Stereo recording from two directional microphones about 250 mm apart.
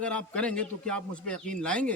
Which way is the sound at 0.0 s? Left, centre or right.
Centre.